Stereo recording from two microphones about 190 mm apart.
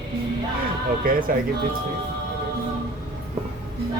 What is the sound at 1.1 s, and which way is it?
Speech, 50° right (ahead or behind).